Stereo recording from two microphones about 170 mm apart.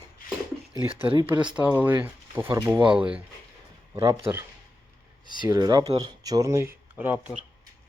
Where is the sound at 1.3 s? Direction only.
5° right (ahead or behind).